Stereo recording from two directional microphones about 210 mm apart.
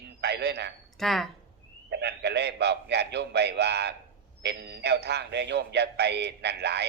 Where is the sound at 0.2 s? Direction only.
50° right (ahead or behind).